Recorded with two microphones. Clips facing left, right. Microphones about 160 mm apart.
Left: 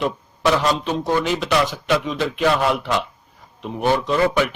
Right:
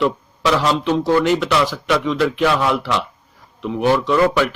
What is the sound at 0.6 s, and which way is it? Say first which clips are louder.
Speech: right 3 dB; 70° right (ahead or behind).